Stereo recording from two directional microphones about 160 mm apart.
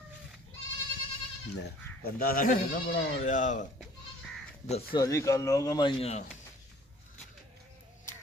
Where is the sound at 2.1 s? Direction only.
65° left (ahead or behind).